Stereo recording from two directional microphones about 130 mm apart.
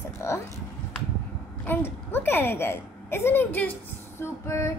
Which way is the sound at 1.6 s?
15° left (ahead or behind).